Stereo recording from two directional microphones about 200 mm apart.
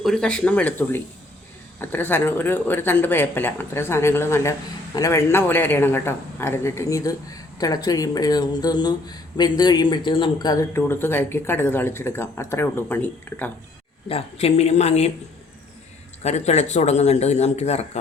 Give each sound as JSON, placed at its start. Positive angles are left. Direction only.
{"t": 0.0, "sound": "speech", "side_deg": 5}
{"t": 14.1, "sound": "a man's voice", "side_deg": 30}
{"t": 16.2, "sound": "a man's voice", "side_deg": 35}